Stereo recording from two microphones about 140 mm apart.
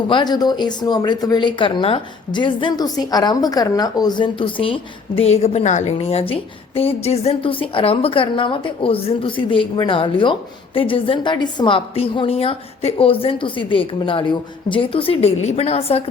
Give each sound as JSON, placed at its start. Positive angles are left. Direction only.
{"t": 0.1, "sound": "speech", "side_deg": 30}